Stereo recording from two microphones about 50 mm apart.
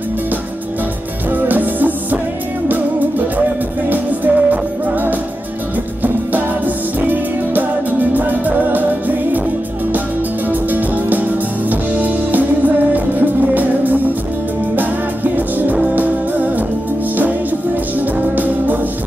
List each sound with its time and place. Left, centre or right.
1.3 s music: right
7.0 s music: right
10.5 s music: right
18.3 s music: right